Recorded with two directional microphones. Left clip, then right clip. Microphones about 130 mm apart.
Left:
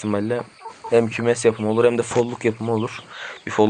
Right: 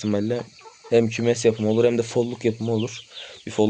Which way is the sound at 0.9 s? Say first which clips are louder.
Left 2 dB; 55° right (ahead or behind).